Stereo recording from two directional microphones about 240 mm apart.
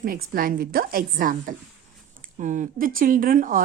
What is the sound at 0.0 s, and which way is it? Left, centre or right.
A woman's voice, right.